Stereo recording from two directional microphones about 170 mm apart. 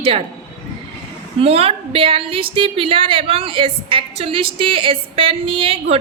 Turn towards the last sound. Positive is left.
turn(degrees=-35)  # may be behind; listen again after turning